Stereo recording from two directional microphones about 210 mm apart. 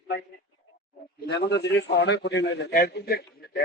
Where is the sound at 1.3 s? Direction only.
50° left (ahead or behind).